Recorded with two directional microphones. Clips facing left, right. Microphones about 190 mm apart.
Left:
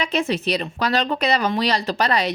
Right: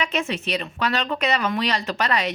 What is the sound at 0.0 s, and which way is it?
A woman's voice, 35° left (ahead or behind).